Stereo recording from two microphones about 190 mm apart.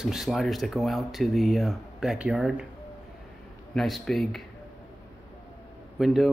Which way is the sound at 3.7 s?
Centre (ahead or behind).